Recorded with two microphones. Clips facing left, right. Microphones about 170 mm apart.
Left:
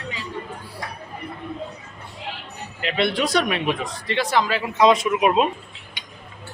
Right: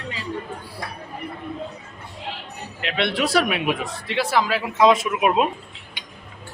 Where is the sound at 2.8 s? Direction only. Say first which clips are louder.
Left 1 dB; centre (ahead or behind).